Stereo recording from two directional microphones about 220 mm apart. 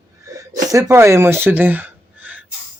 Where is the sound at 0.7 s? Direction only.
15° right (ahead or behind).